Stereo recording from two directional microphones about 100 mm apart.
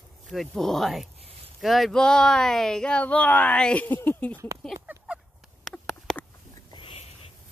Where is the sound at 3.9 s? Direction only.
20° left (ahead or behind).